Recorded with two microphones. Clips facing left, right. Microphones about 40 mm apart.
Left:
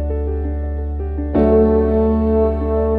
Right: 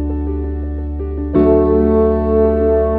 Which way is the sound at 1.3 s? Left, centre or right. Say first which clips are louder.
Right 2 dB; centre.